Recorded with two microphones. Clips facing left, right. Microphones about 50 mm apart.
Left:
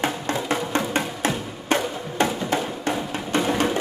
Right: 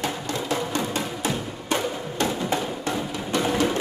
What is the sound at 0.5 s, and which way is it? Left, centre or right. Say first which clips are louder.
Music: left 2 dB; left.